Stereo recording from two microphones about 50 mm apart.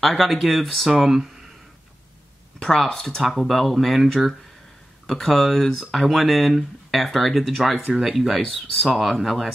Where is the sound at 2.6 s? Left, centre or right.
Centre.